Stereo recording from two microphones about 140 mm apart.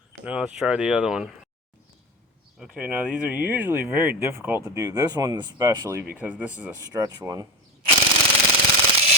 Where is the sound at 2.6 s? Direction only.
10° right (ahead or behind).